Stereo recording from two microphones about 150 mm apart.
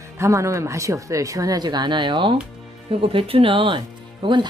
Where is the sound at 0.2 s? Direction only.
20° right (ahead or behind).